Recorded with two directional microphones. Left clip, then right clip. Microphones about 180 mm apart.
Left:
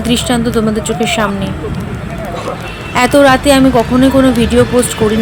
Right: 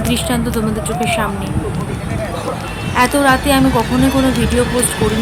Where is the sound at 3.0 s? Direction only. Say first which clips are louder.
Left 5 dB; 25° left (ahead or behind).